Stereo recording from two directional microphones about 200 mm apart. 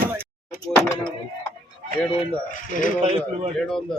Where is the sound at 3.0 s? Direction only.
30° right (ahead or behind).